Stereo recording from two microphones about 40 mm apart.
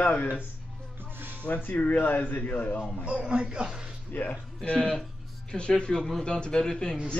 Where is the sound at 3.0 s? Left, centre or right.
Right.